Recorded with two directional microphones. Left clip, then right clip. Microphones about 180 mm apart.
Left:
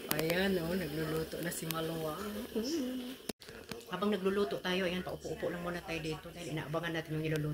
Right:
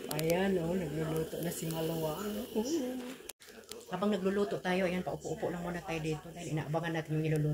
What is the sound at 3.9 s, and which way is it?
Speech, 10° left (ahead or behind).